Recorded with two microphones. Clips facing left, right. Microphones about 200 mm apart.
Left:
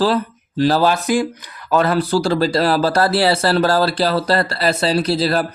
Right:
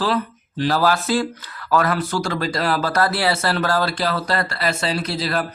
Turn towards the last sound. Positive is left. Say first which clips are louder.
# left 6 dB
turn(degrees=35)  # may be behind; listen again after turning